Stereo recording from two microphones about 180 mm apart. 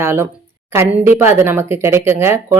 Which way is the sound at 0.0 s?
15° right (ahead or behind).